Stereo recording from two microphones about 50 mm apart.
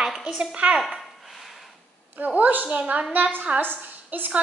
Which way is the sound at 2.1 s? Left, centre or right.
Right.